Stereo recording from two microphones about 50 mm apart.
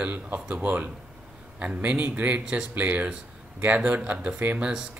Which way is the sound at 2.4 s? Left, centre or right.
Centre.